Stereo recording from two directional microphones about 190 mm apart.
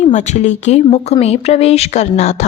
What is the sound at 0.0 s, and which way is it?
Speech, 40° left (ahead or behind).